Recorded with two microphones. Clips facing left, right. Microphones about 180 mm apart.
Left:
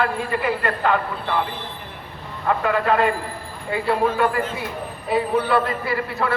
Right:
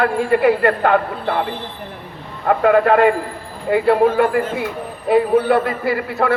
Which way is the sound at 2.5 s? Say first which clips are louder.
Right 7 dB; 55° right (ahead or behind).